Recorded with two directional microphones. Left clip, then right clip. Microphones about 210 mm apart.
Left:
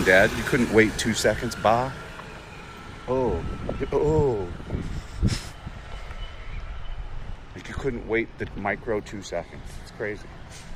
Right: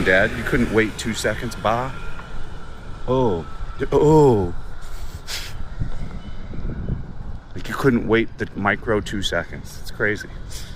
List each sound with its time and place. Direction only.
0.0 s speech: 10° right (ahead or behind)
3.1 s speech: 30° right (ahead or behind)
7.5 s speech: 35° right (ahead or behind)